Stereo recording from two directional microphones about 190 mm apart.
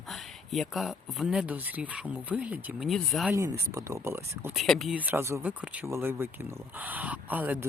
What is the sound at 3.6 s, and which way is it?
Speech, 15° right (ahead or behind).